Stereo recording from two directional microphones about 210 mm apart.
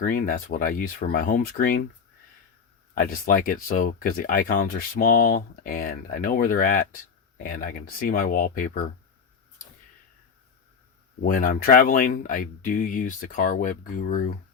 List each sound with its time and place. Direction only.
0.0 s speech: 40° left (ahead or behind)
2.9 s speech: 40° left (ahead or behind)
11.2 s speech: 40° left (ahead or behind)